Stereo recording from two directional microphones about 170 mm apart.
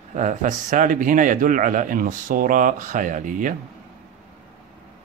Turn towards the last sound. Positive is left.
turn(degrees=-50)  # may be behind; listen again after turning